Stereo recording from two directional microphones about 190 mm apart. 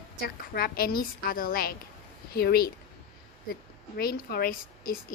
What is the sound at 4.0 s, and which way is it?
A woman's voice, 55° left (ahead or behind).